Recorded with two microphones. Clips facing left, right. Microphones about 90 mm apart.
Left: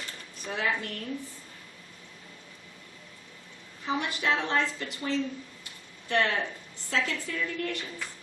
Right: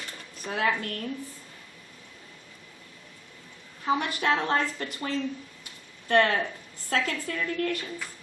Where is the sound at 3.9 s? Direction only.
45° right (ahead or behind).